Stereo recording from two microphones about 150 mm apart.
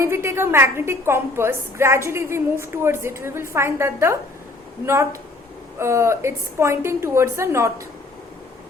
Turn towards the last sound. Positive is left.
turn(degrees=-20)  # may be behind; listen again after turning